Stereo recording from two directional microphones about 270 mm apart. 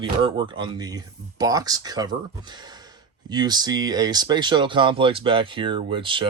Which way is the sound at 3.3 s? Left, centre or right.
Centre.